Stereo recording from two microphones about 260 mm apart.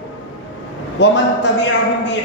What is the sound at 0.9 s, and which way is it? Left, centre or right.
A woman's voice, left.